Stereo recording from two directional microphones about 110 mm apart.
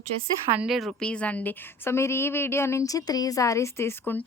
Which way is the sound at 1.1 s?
10° left (ahead or behind).